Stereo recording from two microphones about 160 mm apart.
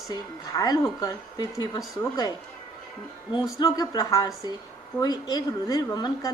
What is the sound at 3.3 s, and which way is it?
Speech, 25° left (ahead or behind).